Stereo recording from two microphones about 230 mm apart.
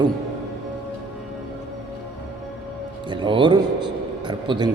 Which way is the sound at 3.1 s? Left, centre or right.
Right.